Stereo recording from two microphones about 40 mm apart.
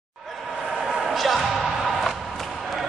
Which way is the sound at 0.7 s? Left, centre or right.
Centre.